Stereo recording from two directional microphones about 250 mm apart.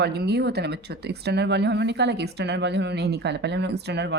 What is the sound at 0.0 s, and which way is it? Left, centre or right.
Speech, right.